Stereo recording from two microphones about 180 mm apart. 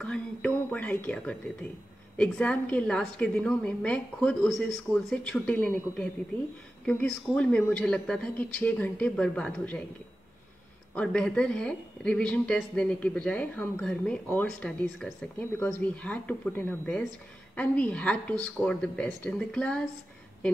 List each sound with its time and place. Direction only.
0.0 s a woman's voice: 5° left (ahead or behind)
11.0 s a woman's voice: 5° left (ahead or behind)